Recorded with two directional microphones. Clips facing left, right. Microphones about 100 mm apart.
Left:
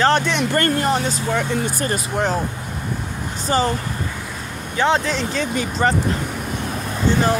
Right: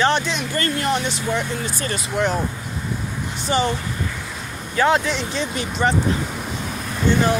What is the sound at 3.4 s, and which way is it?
Speech, 40° left (ahead or behind).